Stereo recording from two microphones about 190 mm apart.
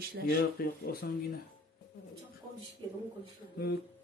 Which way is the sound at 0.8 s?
55° left (ahead or behind).